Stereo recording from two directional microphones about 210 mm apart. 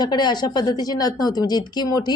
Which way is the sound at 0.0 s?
20° left (ahead or behind).